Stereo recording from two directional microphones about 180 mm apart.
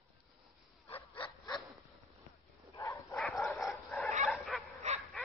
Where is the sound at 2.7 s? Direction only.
15° left (ahead or behind).